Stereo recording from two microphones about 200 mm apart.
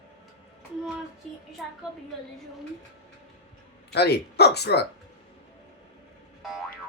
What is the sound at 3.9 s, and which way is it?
Speech, 55° left (ahead or behind).